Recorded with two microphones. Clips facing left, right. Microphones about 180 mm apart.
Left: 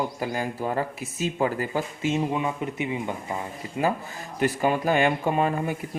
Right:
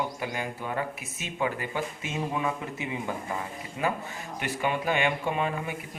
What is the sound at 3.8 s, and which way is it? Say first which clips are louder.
Speech: left 4 dB; 35° left (ahead or behind).